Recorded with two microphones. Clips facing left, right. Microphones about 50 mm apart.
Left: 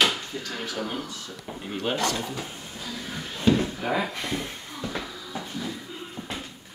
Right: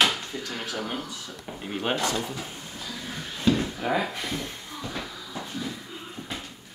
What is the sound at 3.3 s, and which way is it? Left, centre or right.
Drawer open or close, centre.